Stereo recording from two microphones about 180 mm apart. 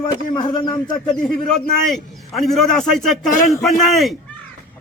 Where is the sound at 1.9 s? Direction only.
Centre (ahead or behind).